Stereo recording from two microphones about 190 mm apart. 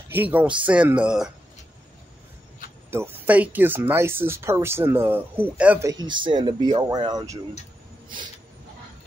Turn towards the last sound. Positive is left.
turn(degrees=-20)  # may be behind; listen again after turning